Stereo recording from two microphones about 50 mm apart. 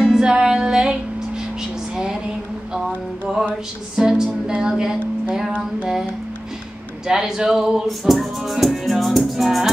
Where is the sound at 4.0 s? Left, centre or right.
Centre.